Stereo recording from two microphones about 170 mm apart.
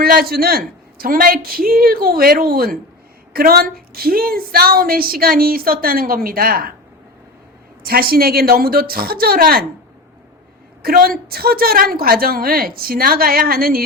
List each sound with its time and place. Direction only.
0.0 s a woman's voice: 60° right (ahead or behind)
7.9 s a woman's voice: 60° right (ahead or behind)
10.8 s a woman's voice: 60° right (ahead or behind)